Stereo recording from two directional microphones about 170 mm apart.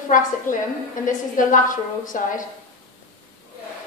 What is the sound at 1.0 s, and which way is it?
A woman's voice, 50° left (ahead or behind).